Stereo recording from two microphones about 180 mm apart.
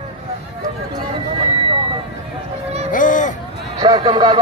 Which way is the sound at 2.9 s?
45° left (ahead or behind).